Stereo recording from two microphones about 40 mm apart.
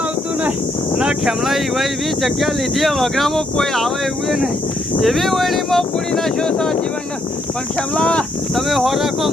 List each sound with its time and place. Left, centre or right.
1.2 s speech: centre
4.9 s speech: centre
7.9 s speech: left
8.5 s speech: centre